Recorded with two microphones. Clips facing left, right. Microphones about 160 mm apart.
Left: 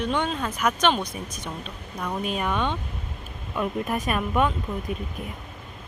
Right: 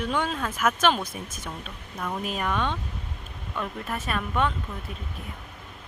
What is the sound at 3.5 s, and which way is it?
Speech, 15° left (ahead or behind).